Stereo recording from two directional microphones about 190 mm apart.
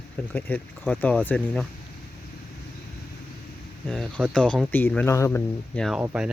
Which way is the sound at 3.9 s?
5° left (ahead or behind).